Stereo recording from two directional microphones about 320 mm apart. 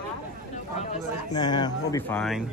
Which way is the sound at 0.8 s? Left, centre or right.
Centre.